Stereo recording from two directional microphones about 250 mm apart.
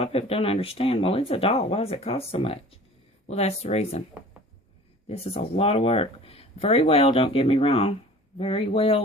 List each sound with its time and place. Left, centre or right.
0.0 s speech: left
5.0 s speech: left